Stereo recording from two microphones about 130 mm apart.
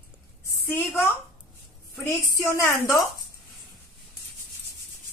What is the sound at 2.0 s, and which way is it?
A woman's voice, 20° left (ahead or behind).